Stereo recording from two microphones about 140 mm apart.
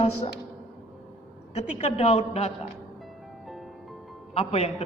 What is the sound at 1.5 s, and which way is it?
Speech, 55° left (ahead or behind).